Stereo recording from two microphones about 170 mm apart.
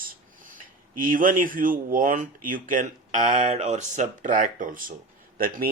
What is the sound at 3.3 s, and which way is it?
Speech, 40° right (ahead or behind).